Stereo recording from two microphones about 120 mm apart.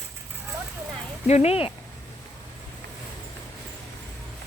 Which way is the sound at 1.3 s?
60° left (ahead or behind).